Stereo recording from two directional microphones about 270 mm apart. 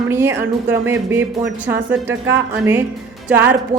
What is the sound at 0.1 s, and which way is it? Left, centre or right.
Speech, centre.